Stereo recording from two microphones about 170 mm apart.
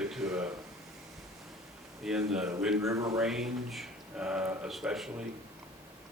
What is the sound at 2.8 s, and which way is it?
Speech, 20° right (ahead or behind).